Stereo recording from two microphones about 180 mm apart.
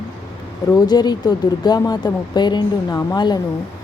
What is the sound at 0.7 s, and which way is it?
A woman's voice, 20° left (ahead or behind).